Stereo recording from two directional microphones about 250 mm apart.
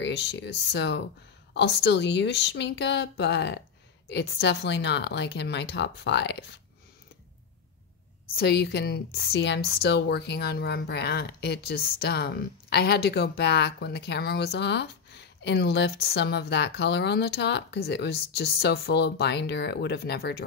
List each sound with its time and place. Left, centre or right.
0.0 s speech: left
8.4 s a woman's voice: left